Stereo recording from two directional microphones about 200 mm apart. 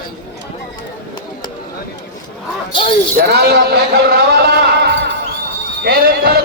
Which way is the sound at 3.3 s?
55° right (ahead or behind).